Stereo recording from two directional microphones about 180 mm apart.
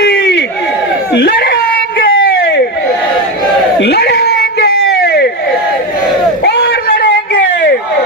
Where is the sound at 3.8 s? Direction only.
60° left (ahead or behind).